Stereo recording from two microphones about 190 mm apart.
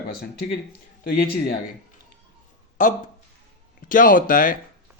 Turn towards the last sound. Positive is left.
turn(degrees=45)  # may be behind; listen again after turning